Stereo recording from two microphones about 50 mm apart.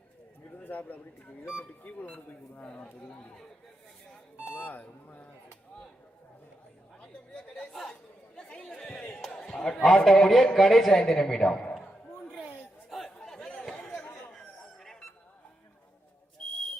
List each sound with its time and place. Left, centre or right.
0.5 s speech: left
2.0 s a man's voice: left
4.5 s speech: left
7.0 s chatter: centre
7.7 s chatter: centre
8.4 s chatter: centre
8.7 s a sound: centre
9.6 s a man's voice: centre
11.6 s a sound: centre
12.9 s chatter: centre
14.3 s chicken: centre